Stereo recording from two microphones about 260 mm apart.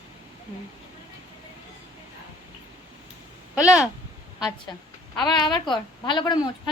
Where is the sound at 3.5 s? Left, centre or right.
Centre.